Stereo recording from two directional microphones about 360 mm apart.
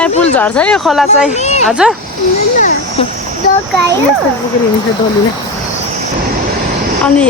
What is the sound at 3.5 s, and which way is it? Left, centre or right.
Speech, left.